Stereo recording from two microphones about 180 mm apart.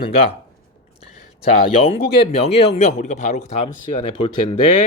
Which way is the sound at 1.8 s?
35° left (ahead or behind).